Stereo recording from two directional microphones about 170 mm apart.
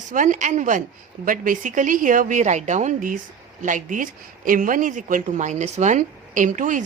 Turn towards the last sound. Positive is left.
turn(degrees=-50)  # may be behind; listen again after turning